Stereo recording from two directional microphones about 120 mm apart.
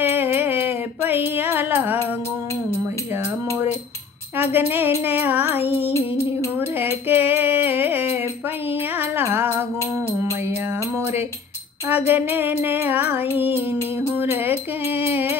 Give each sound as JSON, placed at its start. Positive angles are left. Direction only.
{"t": 0.0, "sound": "a sound", "side_deg": -20}
{"t": 4.4, "sound": "music", "side_deg": -15}
{"t": 5.9, "sound": "music", "side_deg": 25}
{"t": 6.8, "sound": "music", "side_deg": -20}
{"t": 11.0, "sound": "music", "side_deg": -20}